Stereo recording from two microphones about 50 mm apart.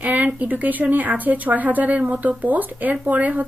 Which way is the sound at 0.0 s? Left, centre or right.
Right.